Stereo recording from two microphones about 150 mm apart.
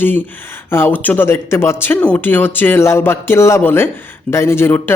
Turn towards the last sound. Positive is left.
turn(degrees=15)  # may be behind; listen again after turning